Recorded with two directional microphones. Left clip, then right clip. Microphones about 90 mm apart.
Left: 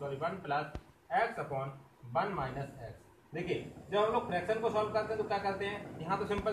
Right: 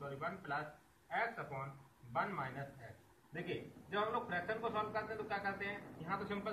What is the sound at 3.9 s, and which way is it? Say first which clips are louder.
A man's voice: left 7 dB; 35° left (ahead or behind).